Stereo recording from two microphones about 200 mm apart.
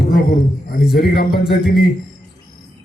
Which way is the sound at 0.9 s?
50° left (ahead or behind).